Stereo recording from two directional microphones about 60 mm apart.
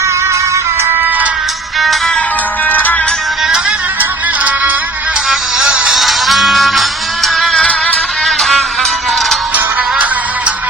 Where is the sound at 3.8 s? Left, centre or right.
Right.